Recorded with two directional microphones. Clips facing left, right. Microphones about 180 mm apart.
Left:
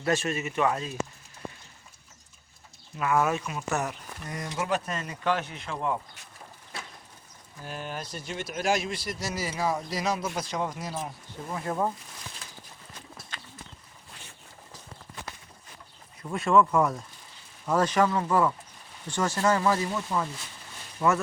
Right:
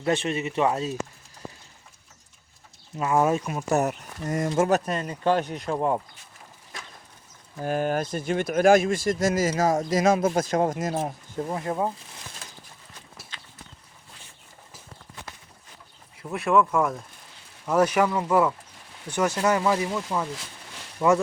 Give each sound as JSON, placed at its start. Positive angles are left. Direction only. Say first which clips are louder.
{"t": 0.0, "sound": "speech", "louder": "right 3 dB", "side_deg": -20}
{"t": 3.0, "sound": "speech", "louder": "right 3 dB", "side_deg": -25}
{"t": 7.6, "sound": "speech", "louder": "right 12 dB", "side_deg": -50}
{"t": 11.5, "sound": "speech", "louder": "right 1 dB", "side_deg": -20}
{"t": 16.3, "sound": "speech", "louder": "right 1 dB", "side_deg": 0}